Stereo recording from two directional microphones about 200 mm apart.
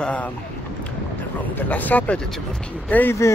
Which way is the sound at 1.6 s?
10° left (ahead or behind).